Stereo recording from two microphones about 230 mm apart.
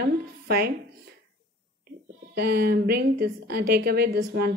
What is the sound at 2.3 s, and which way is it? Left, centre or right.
A woman's voice, right.